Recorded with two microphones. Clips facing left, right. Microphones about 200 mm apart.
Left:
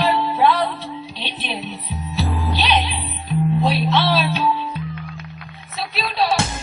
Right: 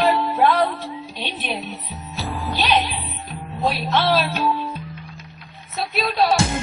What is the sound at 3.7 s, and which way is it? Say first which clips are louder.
Speech: left 1 dB; 45° right (ahead or behind).